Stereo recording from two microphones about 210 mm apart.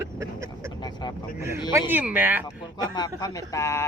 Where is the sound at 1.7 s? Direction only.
10° right (ahead or behind).